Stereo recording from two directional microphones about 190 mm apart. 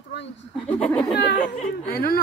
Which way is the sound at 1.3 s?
40° left (ahead or behind).